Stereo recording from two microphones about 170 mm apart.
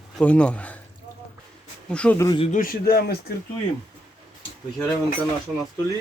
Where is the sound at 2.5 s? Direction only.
55° left (ahead or behind).